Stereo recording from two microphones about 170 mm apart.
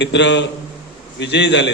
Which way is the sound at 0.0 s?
90° left.